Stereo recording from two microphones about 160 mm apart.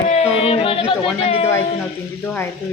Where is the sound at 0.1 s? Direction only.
45° left (ahead or behind).